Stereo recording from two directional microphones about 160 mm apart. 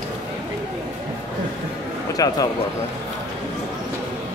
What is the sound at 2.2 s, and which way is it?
Speech, 20° left (ahead or behind).